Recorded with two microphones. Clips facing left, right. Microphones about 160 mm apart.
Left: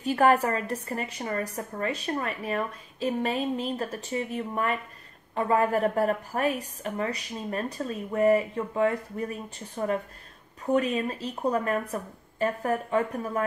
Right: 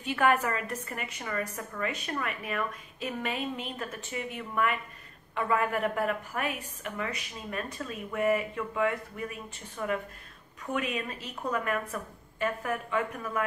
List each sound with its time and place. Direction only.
0.0 s a woman's voice: 35° left (ahead or behind)